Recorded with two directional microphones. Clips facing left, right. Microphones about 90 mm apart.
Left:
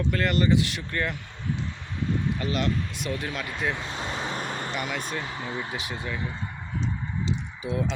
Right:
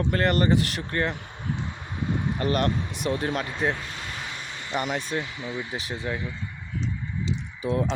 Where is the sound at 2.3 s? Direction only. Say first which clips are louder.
Right 4 dB; 45° right (ahead or behind).